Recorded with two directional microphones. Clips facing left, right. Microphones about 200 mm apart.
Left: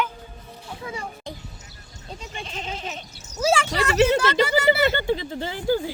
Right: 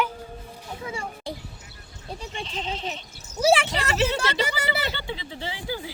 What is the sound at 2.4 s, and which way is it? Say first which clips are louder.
Goat: right 1 dB; 50° left (ahead or behind).